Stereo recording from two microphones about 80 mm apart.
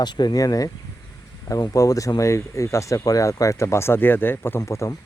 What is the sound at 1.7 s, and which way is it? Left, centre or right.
Speech, left.